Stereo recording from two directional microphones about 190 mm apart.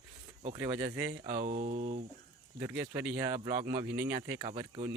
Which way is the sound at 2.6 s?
15° right (ahead or behind).